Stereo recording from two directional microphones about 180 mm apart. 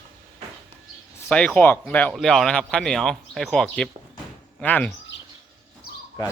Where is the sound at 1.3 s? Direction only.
5° left (ahead or behind).